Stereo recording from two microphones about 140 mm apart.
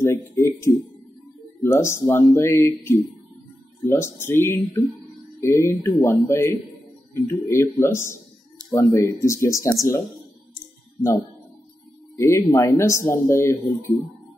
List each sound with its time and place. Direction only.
0.0 s speech: 20° left (ahead or behind)
12.2 s speech: 20° left (ahead or behind)